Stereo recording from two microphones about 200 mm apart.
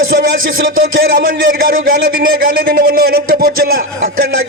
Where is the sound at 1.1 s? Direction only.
45° right (ahead or behind).